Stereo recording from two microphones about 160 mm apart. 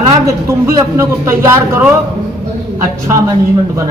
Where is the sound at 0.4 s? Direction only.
20° right (ahead or behind).